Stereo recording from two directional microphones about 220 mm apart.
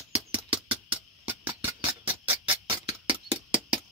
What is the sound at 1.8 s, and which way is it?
Music, 15° right (ahead or behind).